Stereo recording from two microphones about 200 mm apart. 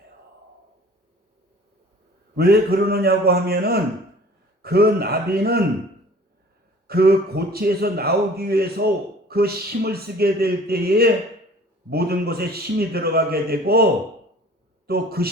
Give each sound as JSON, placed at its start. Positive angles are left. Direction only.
{"t": 2.3, "sound": "a man's voice", "side_deg": -50}
{"t": 6.8, "sound": "a man's voice", "side_deg": -50}
{"t": 14.8, "sound": "a man's voice", "side_deg": -50}